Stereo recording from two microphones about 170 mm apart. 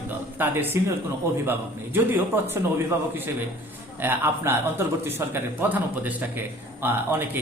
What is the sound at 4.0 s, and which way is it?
Speech, 15° right (ahead or behind).